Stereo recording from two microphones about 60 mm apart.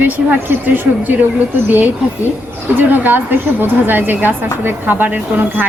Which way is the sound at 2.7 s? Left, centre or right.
Right.